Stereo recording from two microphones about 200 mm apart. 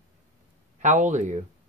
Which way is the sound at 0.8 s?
40° right (ahead or behind).